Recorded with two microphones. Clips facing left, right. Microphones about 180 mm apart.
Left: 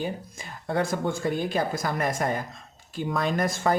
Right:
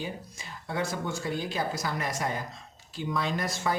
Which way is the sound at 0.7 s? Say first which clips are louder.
Left 5 dB; 50° left (ahead or behind).